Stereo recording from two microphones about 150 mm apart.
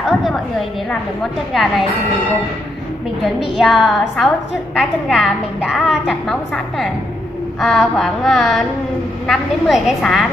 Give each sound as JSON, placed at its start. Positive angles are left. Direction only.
{"t": 0.0, "sound": "a sound", "side_deg": 0}
{"t": 1.5, "sound": "a woman's voice", "side_deg": 0}
{"t": 3.3, "sound": "a woman's voice", "side_deg": 0}